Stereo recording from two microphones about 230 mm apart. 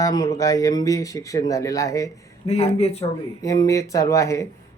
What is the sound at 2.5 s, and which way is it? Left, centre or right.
Speech, left.